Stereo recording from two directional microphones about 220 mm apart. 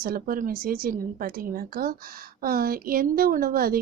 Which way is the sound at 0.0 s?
40° right (ahead or behind).